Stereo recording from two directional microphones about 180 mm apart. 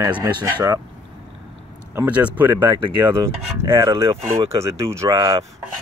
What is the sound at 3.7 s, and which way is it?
Speech, 30° right (ahead or behind).